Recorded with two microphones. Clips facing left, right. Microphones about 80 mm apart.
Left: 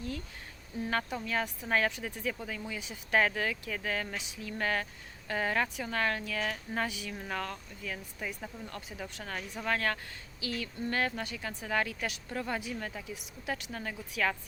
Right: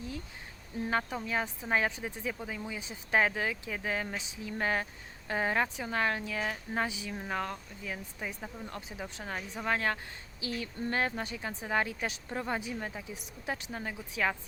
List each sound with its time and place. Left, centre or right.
0.9 s speech: centre